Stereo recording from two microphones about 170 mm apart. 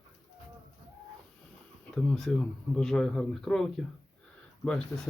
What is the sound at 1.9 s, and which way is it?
Speech, 5° left (ahead or behind).